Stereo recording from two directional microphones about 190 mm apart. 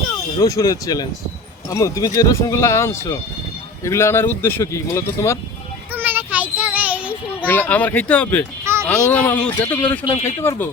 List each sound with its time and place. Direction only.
0.3 s speech: 20° left (ahead or behind)
5.9 s child singing: 10° right (ahead or behind)
7.4 s speech: 10° left (ahead or behind)